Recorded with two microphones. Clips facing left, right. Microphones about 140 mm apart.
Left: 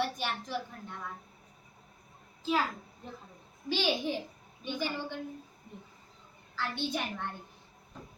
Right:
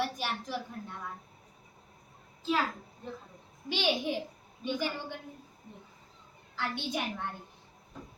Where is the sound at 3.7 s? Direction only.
15° right (ahead or behind).